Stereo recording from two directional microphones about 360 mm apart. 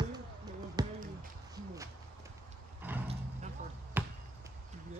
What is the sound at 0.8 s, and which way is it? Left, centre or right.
Basketball bounce, centre.